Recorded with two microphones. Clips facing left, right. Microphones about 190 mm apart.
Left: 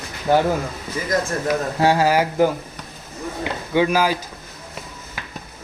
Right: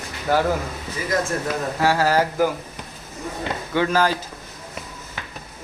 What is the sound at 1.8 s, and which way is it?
Mantra, 20° left (ahead or behind).